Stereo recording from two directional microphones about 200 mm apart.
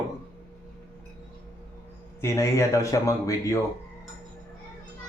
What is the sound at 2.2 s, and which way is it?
Speech, 15° left (ahead or behind).